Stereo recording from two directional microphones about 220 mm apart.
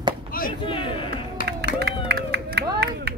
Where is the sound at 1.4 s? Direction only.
40° left (ahead or behind).